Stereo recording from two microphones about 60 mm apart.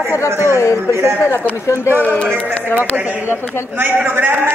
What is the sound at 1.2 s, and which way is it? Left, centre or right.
Speech, left.